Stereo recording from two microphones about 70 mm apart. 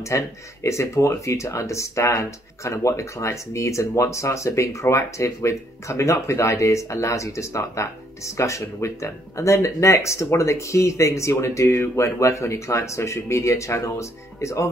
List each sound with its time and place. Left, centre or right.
0.0 s speech: left